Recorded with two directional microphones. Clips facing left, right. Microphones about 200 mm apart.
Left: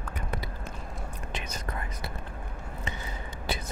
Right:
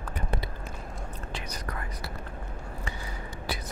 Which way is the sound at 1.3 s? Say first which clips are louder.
Left 1 dB; 25° left (ahead or behind).